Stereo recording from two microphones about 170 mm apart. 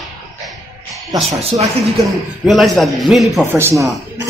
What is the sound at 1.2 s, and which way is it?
Speech, 35° right (ahead or behind).